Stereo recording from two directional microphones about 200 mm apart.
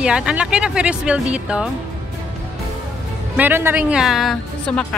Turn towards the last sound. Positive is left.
turn(degrees=5)  # may be behind; listen again after turning